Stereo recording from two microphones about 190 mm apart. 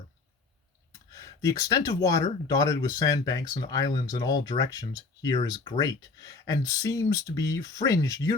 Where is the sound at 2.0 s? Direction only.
15° left (ahead or behind).